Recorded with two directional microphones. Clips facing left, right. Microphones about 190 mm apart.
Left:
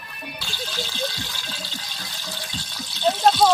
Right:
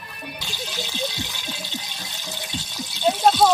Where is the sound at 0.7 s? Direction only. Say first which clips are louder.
Even; 15° right (ahead or behind).